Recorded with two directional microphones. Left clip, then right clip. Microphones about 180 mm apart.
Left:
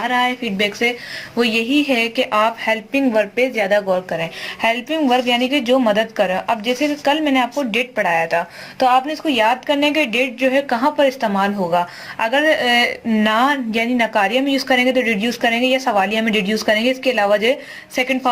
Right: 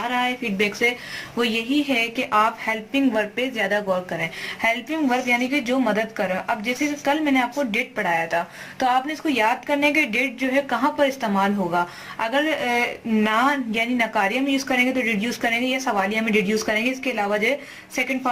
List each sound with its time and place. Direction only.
0.1 s speech: 35° left (ahead or behind)